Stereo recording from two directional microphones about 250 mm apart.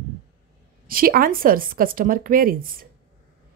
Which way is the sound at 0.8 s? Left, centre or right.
Right.